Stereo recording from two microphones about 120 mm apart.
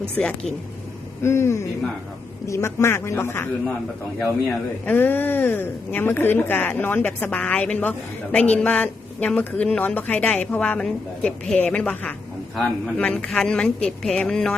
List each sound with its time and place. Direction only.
0.2 s speech: 5° left (ahead or behind)
1.2 s speech: 20° left (ahead or behind); by 14.5 s 5° left (ahead or behind)